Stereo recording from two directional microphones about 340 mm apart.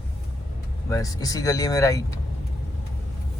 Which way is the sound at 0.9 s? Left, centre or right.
Centre.